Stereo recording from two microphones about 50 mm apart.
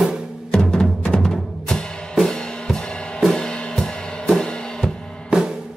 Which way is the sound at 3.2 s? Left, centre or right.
Centre.